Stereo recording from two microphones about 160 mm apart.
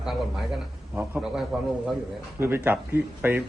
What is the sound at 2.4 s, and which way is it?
A man's voice, 15° right (ahead or behind).